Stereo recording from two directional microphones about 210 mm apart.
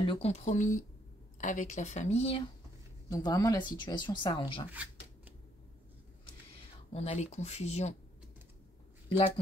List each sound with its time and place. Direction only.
0.0 s speech: 25° left (ahead or behind)
3.1 s speech: 20° left (ahead or behind)
4.6 s shuffling cards: 5° right (ahead or behind)
6.9 s speech: 30° left (ahead or behind)